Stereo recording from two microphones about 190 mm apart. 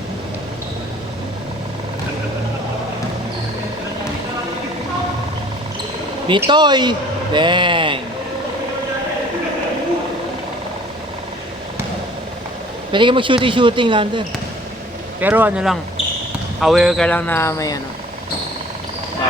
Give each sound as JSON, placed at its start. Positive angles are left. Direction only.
{"t": 6.2, "sound": "speech", "side_deg": -25}
{"t": 12.9, "sound": "speech", "side_deg": -25}
{"t": 15.2, "sound": "speech", "side_deg": -10}